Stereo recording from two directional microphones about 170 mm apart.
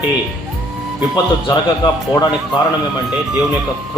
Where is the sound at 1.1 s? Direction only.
25° left (ahead or behind).